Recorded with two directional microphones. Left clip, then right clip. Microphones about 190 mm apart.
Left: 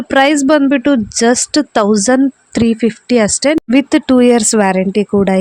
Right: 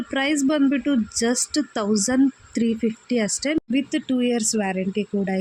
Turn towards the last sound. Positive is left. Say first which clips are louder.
# left 13 dB
turn(degrees=45)  # may be behind; listen again after turning